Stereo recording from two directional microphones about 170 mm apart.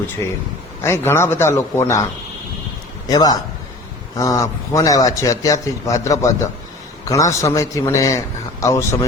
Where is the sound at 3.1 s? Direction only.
20° left (ahead or behind).